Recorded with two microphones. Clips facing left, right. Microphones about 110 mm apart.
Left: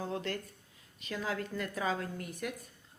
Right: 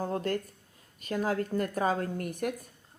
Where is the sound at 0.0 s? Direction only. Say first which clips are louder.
Right 6 dB; 45° right (ahead or behind).